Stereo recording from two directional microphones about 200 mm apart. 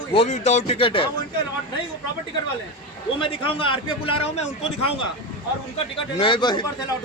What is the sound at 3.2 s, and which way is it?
A man's voice, 25° left (ahead or behind).